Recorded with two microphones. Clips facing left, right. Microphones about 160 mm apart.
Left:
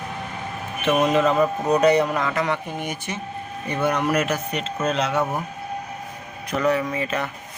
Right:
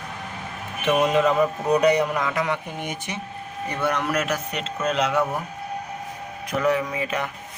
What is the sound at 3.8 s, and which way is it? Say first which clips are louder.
Speech: left 3 dB; 10° left (ahead or behind).